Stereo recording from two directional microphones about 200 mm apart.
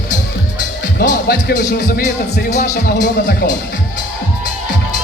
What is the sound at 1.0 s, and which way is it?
Speech, 45° left (ahead or behind).